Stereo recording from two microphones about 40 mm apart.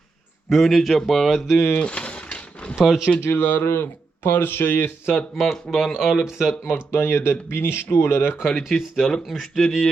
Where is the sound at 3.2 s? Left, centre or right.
Left.